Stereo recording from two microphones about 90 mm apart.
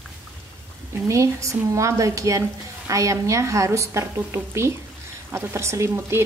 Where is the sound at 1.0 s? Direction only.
35° right (ahead or behind).